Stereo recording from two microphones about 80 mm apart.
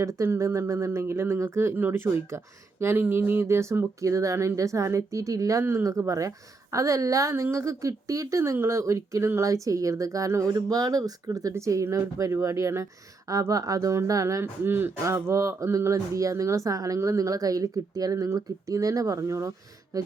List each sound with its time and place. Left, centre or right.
0.0 s speech: right
2.3 s speech: right
14.4 s speech: right
15.0 s speech: right